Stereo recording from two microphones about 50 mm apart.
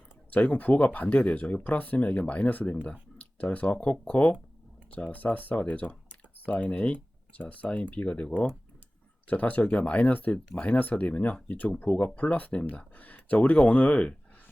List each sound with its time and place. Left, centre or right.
0.3 s speech: left
10.3 s speech: left
10.8 s speech: left